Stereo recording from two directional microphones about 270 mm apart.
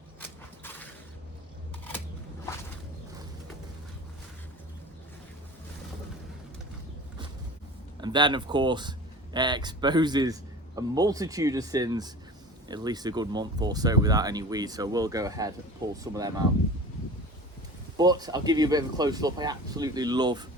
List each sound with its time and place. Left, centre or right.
0.2 s a sound: centre
8.0 s speech: centre
17.9 s speech: centre